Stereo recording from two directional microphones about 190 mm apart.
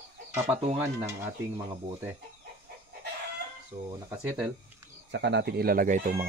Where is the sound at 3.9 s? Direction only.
15° right (ahead or behind).